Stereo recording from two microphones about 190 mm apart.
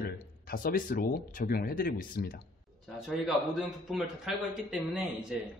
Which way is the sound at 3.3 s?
Centre (ahead or behind).